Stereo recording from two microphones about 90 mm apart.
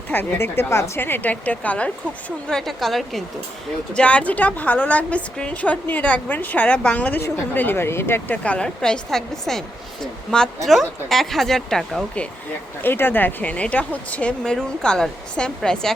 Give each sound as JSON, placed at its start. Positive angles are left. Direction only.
{"t": 0.1, "sound": "a woman's voice", "side_deg": 20}
{"t": 2.5, "sound": "a woman's voice", "side_deg": 5}
{"t": 3.9, "sound": "a woman's voice", "side_deg": 15}
{"t": 12.8, "sound": "a woman's voice", "side_deg": 25}